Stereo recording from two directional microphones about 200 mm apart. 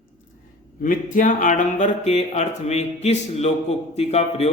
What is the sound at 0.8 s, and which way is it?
Speech, 40° left (ahead or behind).